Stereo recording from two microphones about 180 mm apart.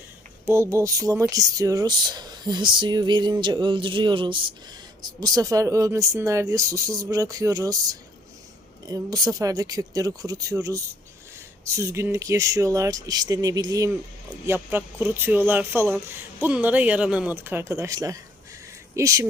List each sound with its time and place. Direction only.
0.4 s speech: 15° right (ahead or behind)